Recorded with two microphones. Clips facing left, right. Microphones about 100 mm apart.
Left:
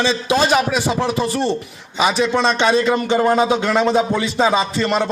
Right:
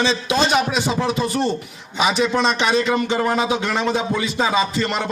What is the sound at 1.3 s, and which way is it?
Speech, centre (ahead or behind).